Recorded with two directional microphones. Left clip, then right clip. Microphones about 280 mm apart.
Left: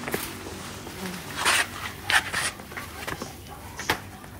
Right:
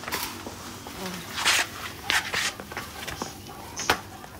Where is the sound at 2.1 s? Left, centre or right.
Right.